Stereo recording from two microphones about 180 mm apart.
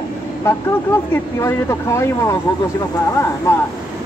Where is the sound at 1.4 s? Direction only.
15° left (ahead or behind).